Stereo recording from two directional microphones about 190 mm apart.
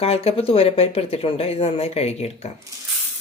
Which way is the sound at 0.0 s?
30° left (ahead or behind).